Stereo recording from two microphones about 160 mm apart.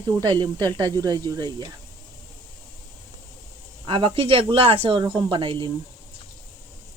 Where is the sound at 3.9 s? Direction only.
35° right (ahead or behind).